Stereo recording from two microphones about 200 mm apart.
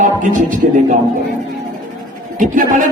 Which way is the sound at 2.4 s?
40° right (ahead or behind).